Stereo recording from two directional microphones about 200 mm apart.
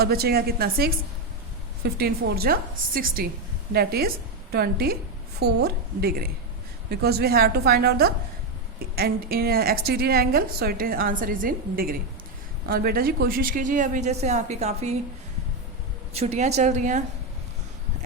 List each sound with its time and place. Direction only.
0.0 s a woman's voice: 50° right (ahead or behind); by 14.9 s 35° right (ahead or behind)
16.1 s a woman's voice: 30° right (ahead or behind)